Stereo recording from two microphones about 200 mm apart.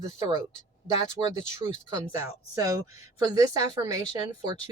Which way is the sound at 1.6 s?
15° right (ahead or behind).